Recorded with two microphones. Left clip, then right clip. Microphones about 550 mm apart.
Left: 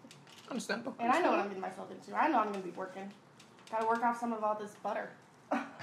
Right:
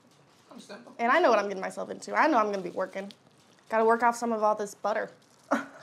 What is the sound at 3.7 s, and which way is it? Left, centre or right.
A woman's voice, right.